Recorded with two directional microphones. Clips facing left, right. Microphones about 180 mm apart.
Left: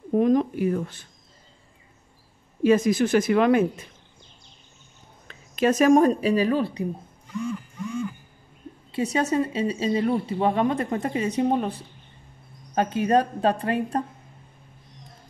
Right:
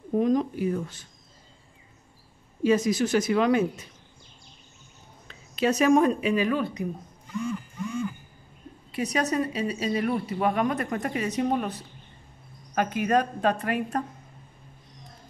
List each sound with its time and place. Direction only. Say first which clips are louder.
0.1 s a woman's voice: left 3 dB; 55° left (ahead or behind)
2.6 s a woman's voice: left 3 dB; 55° left (ahead or behind)
5.3 s speech: left 3 dB; 50° left (ahead or behind); by 7.1 s 30° left (ahead or behind)
8.9 s a woman's voice: left 3 dB; 25° left (ahead or behind)